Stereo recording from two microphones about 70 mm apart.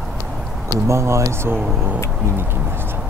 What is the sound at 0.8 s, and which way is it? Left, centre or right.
Speech, right.